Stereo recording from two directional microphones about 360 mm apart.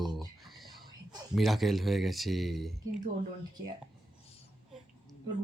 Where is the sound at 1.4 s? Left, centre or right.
Centre.